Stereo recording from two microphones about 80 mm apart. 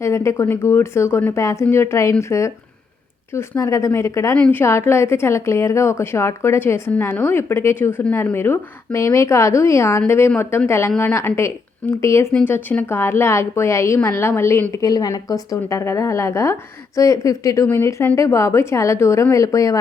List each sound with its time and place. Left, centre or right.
0.0 s a woman's voice: left
3.6 s a woman's voice: left
12.5 s a woman's voice: left
14.7 s a woman's voice: left
15.8 s a woman's voice: left
17.7 s a woman's voice: left